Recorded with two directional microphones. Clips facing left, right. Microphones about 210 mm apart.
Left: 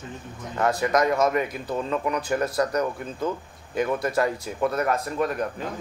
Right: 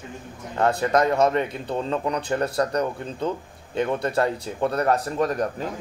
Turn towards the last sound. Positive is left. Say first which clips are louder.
# right 2 dB
turn(degrees=-35)  # may be behind; listen again after turning